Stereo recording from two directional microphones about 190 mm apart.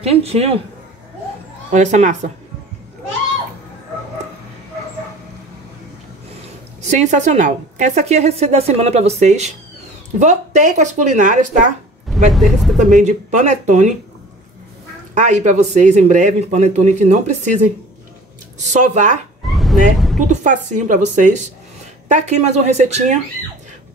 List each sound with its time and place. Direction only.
0.0 s speech: 30° right (ahead or behind)
1.7 s speech: 40° right (ahead or behind)
6.4 s speech: 35° right (ahead or behind)
12.3 s speech: centre (ahead or behind)
12.9 s speech: 40° right (ahead or behind)
15.1 s speech: 40° right (ahead or behind)
19.4 s a sound: centre (ahead or behind)
20.2 s speech: 40° right (ahead or behind)